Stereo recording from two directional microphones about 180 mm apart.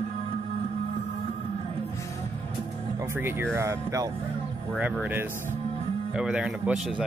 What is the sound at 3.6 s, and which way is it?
Speech, 15° right (ahead or behind).